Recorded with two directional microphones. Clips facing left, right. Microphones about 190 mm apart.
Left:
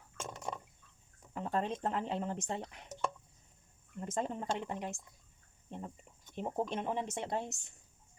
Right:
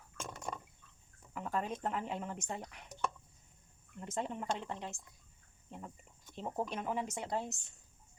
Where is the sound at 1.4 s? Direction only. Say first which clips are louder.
Left 3 dB; 30° left (ahead or behind).